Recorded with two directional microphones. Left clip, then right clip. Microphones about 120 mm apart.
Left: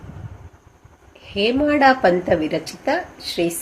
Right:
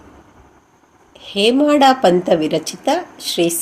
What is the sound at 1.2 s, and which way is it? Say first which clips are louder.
A woman's voice: right 5 dB; 40° right (ahead or behind).